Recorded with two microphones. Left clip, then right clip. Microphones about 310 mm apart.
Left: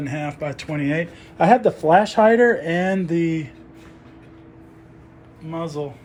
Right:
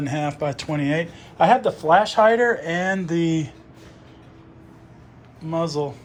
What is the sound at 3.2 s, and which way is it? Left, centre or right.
Speech, right.